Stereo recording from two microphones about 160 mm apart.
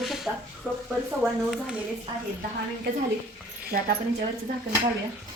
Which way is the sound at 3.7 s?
75° right (ahead or behind).